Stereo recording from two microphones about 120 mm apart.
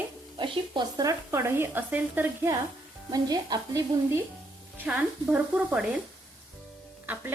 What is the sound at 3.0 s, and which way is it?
Speech, 35° right (ahead or behind).